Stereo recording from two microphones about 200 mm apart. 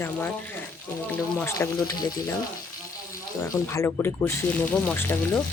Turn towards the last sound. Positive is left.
turn(degrees=10)  # may be behind; listen again after turning